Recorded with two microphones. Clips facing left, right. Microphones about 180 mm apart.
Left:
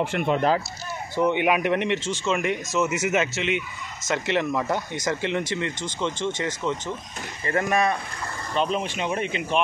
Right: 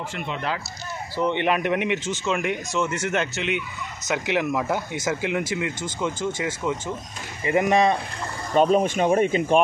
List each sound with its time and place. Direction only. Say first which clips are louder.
0.0 s speech: left 7 dB; 55° left (ahead or behind)
1.1 s speech: left 1 dB; 10° left (ahead or behind); by 6.8 s 5° right (ahead or behind)
7.4 s speech: right 4 dB; 20° right (ahead or behind)
8.5 s speech: right 7 dB; 45° right (ahead or behind)